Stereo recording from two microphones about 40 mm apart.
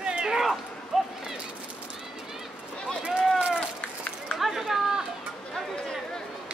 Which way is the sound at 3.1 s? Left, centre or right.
Centre.